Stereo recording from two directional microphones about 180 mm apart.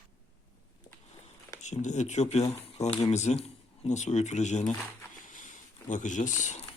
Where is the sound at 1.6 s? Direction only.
40° left (ahead or behind).